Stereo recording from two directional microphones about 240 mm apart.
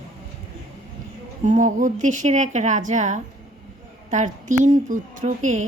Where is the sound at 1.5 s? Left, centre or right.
Right.